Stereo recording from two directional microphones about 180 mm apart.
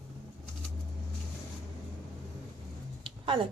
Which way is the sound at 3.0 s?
25° right (ahead or behind).